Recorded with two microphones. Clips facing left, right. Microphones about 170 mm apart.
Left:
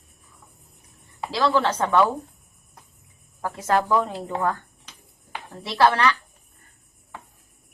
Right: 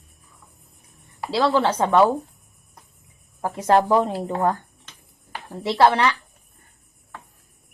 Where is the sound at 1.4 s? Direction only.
20° right (ahead or behind).